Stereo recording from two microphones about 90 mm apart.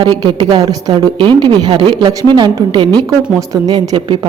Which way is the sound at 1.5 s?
60° right (ahead or behind).